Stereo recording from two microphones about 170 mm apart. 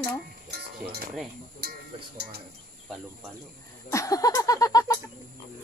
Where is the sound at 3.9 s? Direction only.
20° left (ahead or behind).